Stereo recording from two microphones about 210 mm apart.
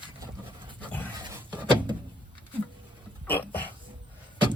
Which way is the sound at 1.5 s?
20° right (ahead or behind).